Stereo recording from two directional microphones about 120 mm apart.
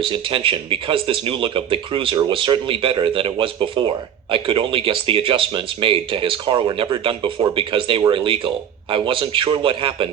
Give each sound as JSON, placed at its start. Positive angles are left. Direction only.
{"t": 0.0, "sound": "speech", "side_deg": -45}